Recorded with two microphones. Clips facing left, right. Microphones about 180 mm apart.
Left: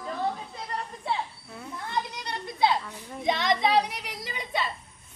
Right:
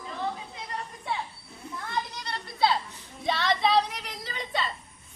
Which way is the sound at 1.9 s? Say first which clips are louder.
Left 1 dB; 20° left (ahead or behind).